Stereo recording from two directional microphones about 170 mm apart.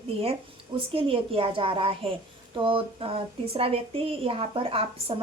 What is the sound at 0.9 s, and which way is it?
A woman's voice, 30° right (ahead or behind).